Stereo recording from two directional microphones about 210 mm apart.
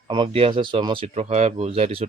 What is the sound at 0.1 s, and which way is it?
Speech, 25° right (ahead or behind).